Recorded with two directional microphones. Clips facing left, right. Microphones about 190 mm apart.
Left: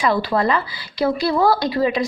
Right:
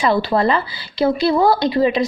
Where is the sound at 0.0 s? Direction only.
25° right (ahead or behind).